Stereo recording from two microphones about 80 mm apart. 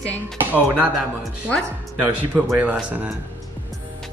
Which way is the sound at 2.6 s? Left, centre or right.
Centre.